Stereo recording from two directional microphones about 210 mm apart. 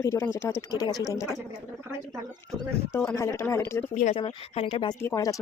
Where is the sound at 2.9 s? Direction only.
10° left (ahead or behind).